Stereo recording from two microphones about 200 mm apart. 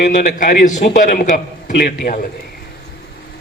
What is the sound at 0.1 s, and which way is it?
A man's voice, 40° left (ahead or behind).